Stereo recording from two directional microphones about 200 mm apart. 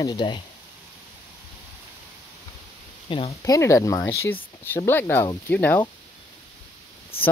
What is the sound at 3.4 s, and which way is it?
Speech, 15° left (ahead or behind).